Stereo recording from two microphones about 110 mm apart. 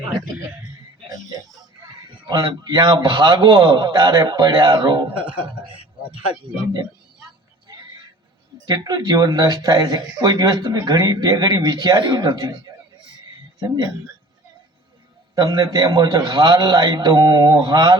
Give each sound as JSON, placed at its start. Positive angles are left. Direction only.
{"t": 2.2, "sound": "a man's voice", "side_deg": -35}
{"t": 8.6, "sound": "a man's voice", "side_deg": -40}
{"t": 13.6, "sound": "a man's voice", "side_deg": -35}
{"t": 15.4, "sound": "a man's voice", "side_deg": -35}